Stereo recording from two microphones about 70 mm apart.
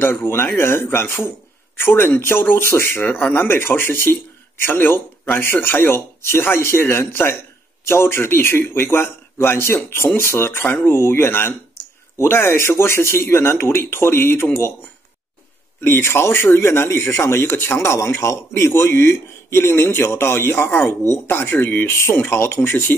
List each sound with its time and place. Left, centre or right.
0.0 s a man's voice: left
15.8 s a man's voice: left